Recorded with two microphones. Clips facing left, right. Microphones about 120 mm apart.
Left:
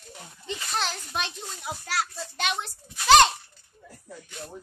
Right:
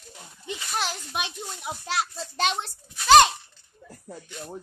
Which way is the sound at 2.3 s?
35° right (ahead or behind).